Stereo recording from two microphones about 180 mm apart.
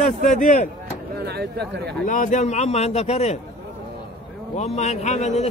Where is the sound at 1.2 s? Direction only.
65° right (ahead or behind).